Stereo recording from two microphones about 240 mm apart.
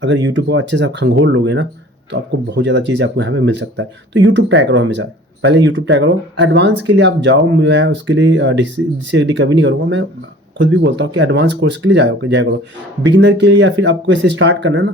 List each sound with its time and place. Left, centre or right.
0.0 s speech: right